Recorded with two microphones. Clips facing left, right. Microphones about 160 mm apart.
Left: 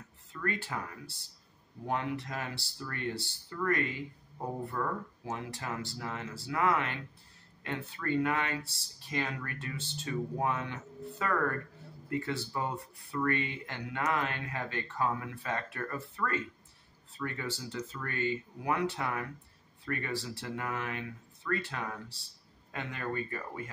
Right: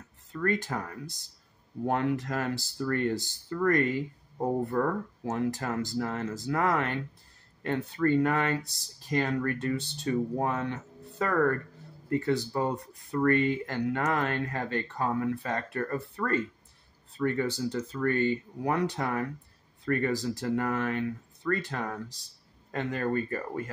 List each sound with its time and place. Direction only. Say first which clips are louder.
0.3 s speech: right 7 dB; 40° right (ahead or behind)